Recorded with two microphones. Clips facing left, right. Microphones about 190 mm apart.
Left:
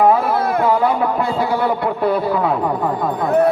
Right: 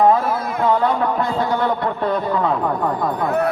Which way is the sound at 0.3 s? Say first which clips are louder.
Left 5 dB; 65° left (ahead or behind).